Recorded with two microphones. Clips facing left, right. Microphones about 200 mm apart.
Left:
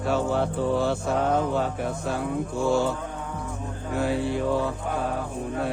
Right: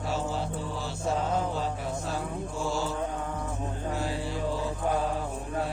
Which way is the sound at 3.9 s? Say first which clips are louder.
Left 10 dB; 60° left (ahead or behind).